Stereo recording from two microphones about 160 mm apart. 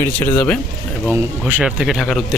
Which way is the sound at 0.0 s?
10° left (ahead or behind).